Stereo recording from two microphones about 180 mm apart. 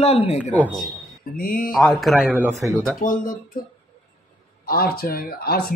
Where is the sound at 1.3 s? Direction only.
50° left (ahead or behind).